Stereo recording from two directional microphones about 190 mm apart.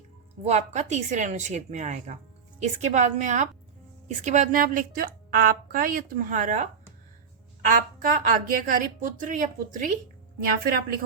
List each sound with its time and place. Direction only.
0.4 s a woman's voice: 35° right (ahead or behind)
7.7 s a woman's voice: 50° right (ahead or behind)